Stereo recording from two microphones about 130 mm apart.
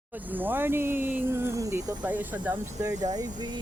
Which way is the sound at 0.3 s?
15° right (ahead or behind).